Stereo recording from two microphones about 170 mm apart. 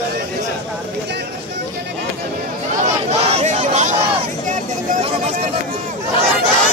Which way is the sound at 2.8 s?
40° right (ahead or behind).